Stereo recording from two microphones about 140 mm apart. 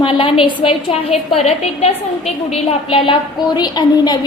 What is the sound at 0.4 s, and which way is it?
A woman's voice, 45° left (ahead or behind).